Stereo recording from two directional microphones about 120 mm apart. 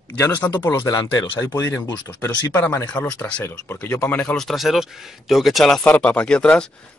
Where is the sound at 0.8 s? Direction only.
30° left (ahead or behind).